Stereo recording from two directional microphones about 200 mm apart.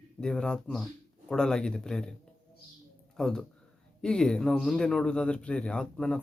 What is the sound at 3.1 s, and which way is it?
Speech, centre (ahead or behind).